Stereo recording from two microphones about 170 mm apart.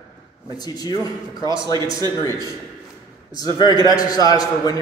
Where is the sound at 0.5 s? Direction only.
25° left (ahead or behind).